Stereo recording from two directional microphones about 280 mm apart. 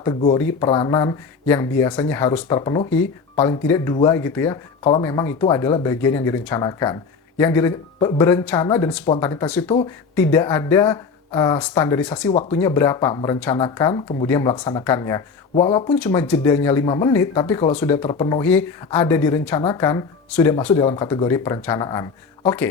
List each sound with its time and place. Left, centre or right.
0.0 s speech: centre
16.0 s speech: centre